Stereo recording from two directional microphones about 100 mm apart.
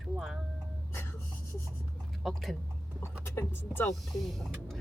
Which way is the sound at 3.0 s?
25° left (ahead or behind).